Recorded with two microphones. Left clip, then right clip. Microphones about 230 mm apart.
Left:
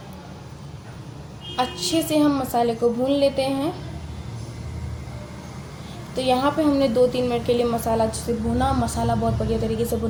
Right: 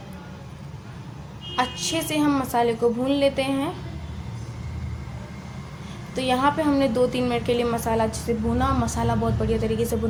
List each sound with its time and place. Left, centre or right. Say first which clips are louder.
1.5 s a woman's voice: left 2 dB; right
6.1 s a woman's voice: left 1 dB; right